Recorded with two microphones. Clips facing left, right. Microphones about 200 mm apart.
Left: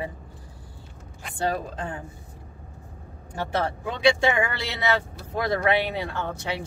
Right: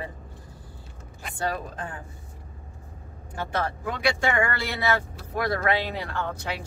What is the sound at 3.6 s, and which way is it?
Speech, 20° left (ahead or behind).